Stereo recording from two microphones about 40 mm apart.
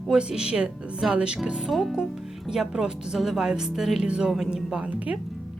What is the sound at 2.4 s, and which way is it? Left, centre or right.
A woman's voice, centre.